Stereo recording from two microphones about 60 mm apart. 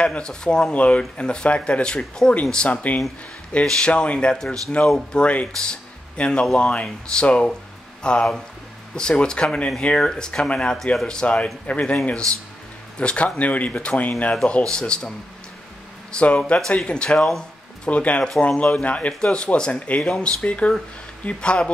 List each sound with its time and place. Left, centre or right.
0.0 s speech: centre
13.0 s speech: centre
14.3 s speech: centre
20.4 s speech: left